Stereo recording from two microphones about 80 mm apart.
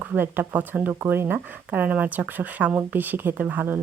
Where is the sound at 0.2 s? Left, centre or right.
Right.